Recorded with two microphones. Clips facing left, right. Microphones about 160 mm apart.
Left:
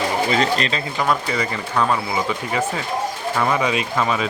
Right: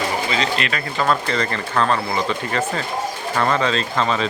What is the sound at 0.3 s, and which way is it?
Speech, 45° left (ahead or behind).